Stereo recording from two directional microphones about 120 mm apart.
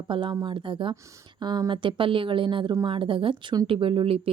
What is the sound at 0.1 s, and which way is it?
A woman's voice, 40° right (ahead or behind).